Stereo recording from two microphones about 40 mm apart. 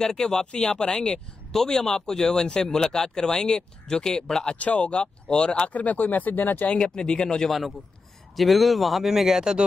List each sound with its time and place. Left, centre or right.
0.0 s speech: centre
4.6 s speech: left
5.7 s speech: left
6.9 s speech: centre
7.4 s speech: centre
9.4 s speech: centre